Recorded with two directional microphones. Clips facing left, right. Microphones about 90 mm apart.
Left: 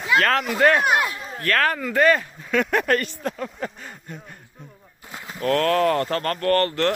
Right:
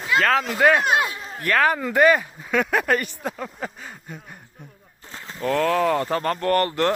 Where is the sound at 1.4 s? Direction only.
15° right (ahead or behind).